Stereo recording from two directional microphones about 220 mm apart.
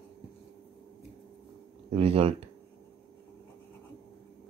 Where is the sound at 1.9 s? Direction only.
25° right (ahead or behind).